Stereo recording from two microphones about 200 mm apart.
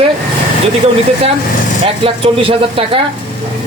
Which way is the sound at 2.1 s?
30° right (ahead or behind).